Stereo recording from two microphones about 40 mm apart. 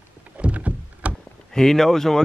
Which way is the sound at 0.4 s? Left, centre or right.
Right.